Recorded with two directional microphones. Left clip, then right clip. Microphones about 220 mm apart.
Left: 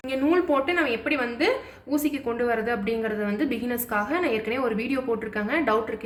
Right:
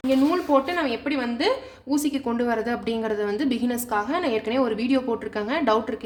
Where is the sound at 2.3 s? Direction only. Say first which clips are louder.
Left 1 dB; 50° right (ahead or behind).